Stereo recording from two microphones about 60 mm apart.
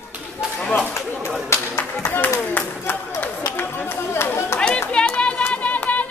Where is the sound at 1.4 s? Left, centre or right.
Left.